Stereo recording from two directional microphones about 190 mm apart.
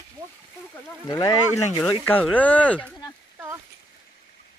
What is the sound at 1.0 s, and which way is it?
Speech, 20° left (ahead or behind).